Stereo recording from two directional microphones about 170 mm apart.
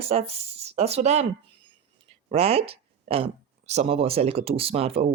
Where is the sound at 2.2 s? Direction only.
35° right (ahead or behind).